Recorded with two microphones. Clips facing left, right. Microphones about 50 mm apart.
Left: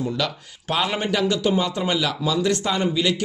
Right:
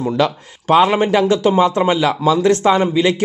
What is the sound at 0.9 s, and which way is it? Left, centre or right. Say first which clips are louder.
Speech: right 8 dB; right.